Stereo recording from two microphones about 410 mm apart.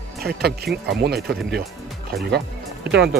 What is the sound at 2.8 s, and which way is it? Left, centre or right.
Speech, right.